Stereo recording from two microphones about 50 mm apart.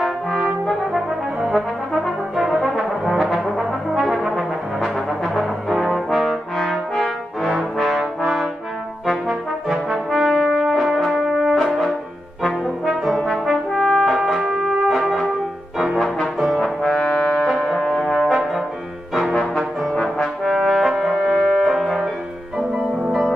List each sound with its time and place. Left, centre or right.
0.0 s brass instrument: centre
16.6 s brass instrument: centre
17.1 s brass instrument: centre
17.4 s music: centre
17.8 s brass instrument: centre
20.0 s brass instrument: centre